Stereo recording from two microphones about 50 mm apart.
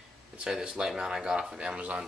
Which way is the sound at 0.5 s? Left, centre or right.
Centre.